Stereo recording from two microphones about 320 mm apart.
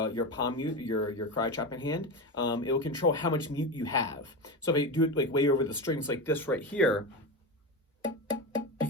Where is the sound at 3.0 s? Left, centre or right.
Left.